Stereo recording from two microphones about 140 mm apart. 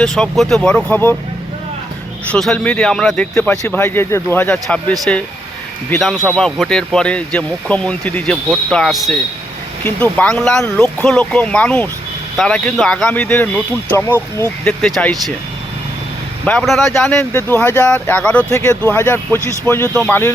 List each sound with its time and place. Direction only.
0.0 s speech: 5° left (ahead or behind)
2.3 s a man's voice: 5° left (ahead or behind)
6.2 s a man's voice: 5° left (ahead or behind)
9.8 s a man's voice: 10° left (ahead or behind)
14.8 s speech: 5° left (ahead or behind)
16.5 s a man's voice: 5° left (ahead or behind)
18.5 s a man's voice: 20° left (ahead or behind)